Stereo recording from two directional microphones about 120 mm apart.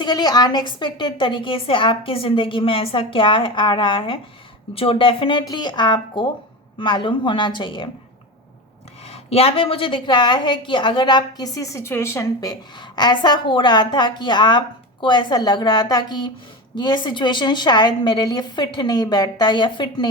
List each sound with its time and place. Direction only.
0.0 s a woman's voice: 35° left (ahead or behind)
9.0 s a woman's voice: 55° left (ahead or behind); by 20.1 s 40° left (ahead or behind)